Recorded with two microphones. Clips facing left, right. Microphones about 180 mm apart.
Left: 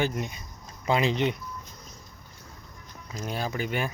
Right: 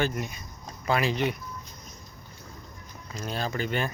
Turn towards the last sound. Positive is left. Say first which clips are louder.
# even
turn(degrees=10)  # may be behind; listen again after turning